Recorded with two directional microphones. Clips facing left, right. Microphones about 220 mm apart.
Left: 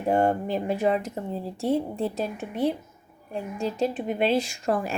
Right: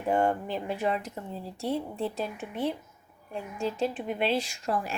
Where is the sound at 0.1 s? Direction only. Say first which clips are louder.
Left 3 dB; 35° left (ahead or behind).